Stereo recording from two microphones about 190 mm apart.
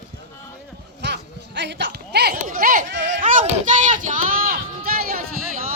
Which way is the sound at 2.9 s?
70° right (ahead or behind).